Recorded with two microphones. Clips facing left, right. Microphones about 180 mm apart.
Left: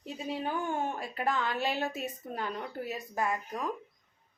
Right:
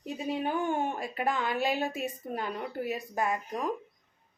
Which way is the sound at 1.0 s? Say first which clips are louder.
Right 1 dB; 15° right (ahead or behind).